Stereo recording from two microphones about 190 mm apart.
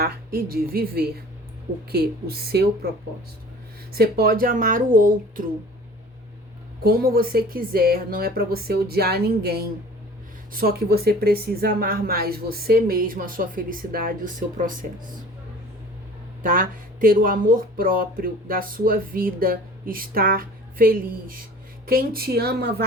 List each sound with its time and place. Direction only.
0.0 s speech: 50° right (ahead or behind)
3.9 s speech: 55° right (ahead or behind)
6.8 s speech: 50° right (ahead or behind)
16.4 s speech: 50° right (ahead or behind)